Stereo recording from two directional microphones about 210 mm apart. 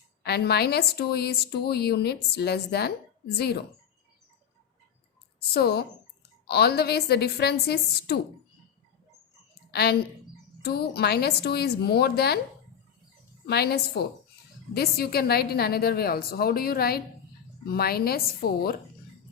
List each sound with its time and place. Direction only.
0.2 s a woman's voice: 50° left (ahead or behind)
5.5 s a woman's voice: 50° left (ahead or behind)
9.7 s a woman's voice: 50° left (ahead or behind)
13.5 s a woman's voice: 50° left (ahead or behind)